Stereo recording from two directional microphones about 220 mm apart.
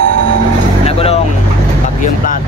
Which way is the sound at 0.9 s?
25° left (ahead or behind).